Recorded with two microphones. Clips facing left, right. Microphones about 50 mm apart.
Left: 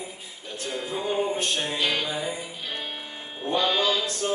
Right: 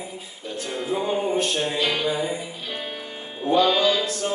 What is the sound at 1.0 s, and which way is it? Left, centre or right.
Music, centre.